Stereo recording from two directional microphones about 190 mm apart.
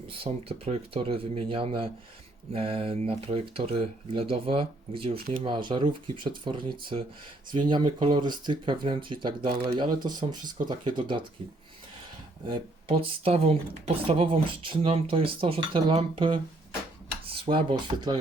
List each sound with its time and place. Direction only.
0.2 s speech: 30° right (ahead or behind)
12.5 s speech: 25° right (ahead or behind)